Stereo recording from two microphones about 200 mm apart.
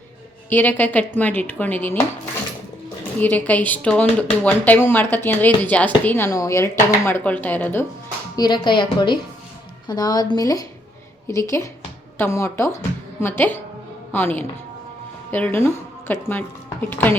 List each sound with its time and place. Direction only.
0.5 s speech: 10° left (ahead or behind)
3.2 s speech: 10° left (ahead or behind)
8.4 s a woman's voice: 20° left (ahead or behind)